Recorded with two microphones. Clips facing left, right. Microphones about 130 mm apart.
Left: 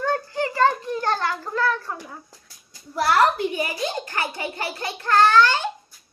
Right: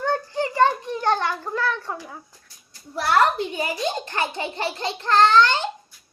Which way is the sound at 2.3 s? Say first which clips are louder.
Left 3 dB; 90° left.